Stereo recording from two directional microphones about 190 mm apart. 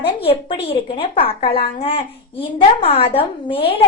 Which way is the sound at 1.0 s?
30° left (ahead or behind).